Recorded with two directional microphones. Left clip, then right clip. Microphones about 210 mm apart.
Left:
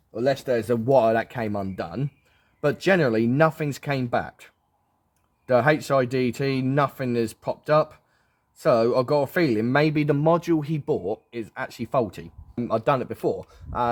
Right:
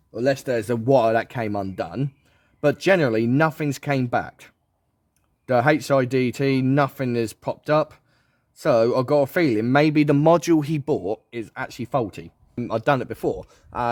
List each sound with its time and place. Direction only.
0.1 s a man's voice: 50° right (ahead or behind)